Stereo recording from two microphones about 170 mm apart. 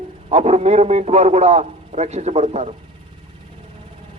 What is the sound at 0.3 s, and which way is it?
Speech, 40° right (ahead or behind).